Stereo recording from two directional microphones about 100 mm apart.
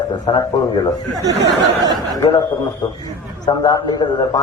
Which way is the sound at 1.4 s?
40° right (ahead or behind).